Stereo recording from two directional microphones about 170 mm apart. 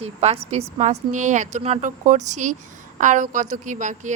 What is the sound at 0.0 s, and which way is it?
A woman's voice, 40° right (ahead or behind).